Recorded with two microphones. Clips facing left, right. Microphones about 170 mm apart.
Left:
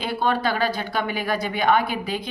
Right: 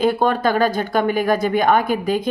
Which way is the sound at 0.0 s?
45° right (ahead or behind).